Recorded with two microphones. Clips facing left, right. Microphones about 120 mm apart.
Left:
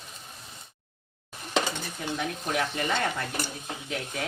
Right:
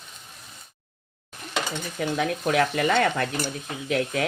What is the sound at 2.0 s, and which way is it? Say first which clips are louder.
Speech: right 9 dB; 70° right (ahead or behind).